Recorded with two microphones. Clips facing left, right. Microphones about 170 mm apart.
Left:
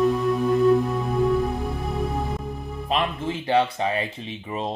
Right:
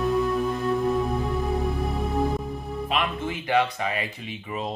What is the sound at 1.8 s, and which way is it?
Music, centre (ahead or behind).